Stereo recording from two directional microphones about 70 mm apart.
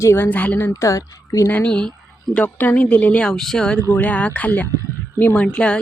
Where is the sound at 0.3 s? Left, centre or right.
Left.